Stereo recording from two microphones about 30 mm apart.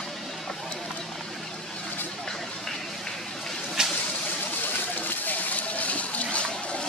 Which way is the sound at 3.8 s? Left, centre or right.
Right.